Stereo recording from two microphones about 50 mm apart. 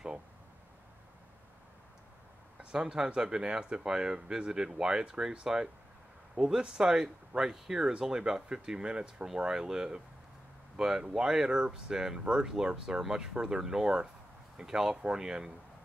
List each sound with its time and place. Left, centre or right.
2.6 s speech: centre